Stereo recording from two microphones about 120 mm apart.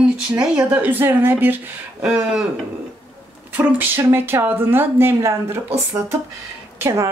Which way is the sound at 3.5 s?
15° right (ahead or behind).